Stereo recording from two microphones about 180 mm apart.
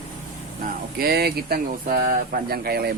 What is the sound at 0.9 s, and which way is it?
Speech, 60° right (ahead or behind).